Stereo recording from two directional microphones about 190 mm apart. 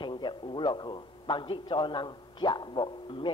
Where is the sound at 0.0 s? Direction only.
25° left (ahead or behind).